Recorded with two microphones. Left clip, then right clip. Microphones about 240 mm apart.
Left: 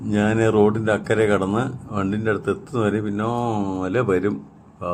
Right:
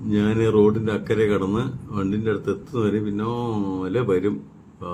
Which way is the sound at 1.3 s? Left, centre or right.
Centre.